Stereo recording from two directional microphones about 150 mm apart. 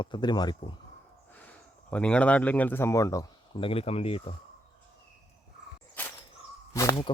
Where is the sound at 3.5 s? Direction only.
40° left (ahead or behind).